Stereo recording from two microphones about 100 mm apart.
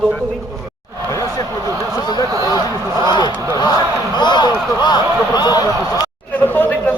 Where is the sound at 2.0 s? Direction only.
45° left (ahead or behind).